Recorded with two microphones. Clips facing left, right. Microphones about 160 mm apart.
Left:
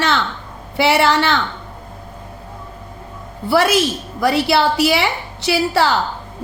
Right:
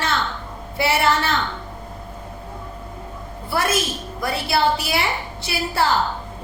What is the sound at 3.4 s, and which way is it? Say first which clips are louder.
A woman's voice: left 7 dB; 80° left.